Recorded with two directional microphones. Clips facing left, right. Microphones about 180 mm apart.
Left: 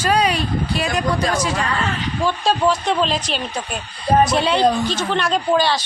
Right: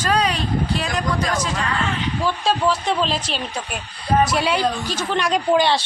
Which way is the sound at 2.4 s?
5° right (ahead or behind).